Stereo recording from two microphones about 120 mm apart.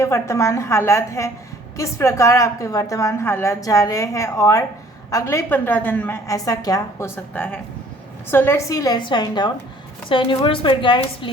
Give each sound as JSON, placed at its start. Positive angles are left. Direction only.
{"t": 0.0, "sound": "a woman's voice", "side_deg": 25}
{"t": 6.2, "sound": "a woman's voice", "side_deg": 30}
{"t": 7.3, "sound": "a woman's voice", "side_deg": 15}
{"t": 8.7, "sound": "a woman's voice", "side_deg": 30}